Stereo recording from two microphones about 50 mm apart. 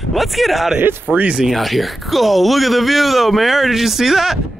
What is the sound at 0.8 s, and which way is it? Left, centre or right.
Speech, right.